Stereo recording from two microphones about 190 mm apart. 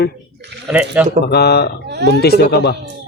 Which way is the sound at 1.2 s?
60° left (ahead or behind).